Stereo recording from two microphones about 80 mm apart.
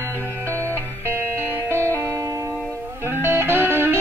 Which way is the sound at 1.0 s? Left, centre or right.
Right.